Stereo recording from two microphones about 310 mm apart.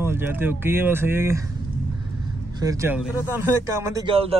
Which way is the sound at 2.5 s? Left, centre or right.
Centre.